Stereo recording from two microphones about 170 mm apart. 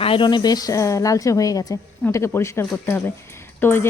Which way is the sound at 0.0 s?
30° left (ahead or behind).